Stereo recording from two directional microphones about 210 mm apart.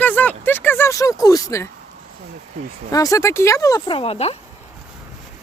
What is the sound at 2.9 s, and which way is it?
Speech, 15° left (ahead or behind).